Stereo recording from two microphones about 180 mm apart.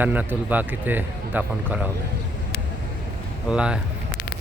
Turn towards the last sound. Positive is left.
turn(degrees=-5)  # may be behind; listen again after turning